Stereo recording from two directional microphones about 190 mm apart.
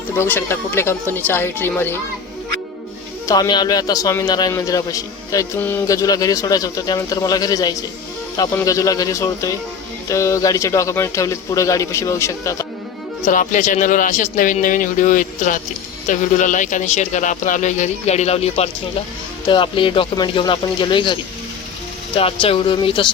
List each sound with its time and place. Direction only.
0.2 s a man's voice: 10° left (ahead or behind)
3.2 s a man's voice: 20° left (ahead or behind)
13.2 s a man's voice: 45° left (ahead or behind); by 23.0 s 25° left (ahead or behind)